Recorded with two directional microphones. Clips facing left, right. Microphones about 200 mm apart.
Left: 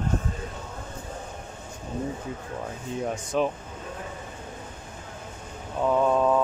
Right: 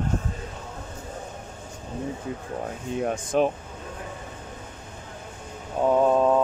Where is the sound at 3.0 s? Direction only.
55° right (ahead or behind).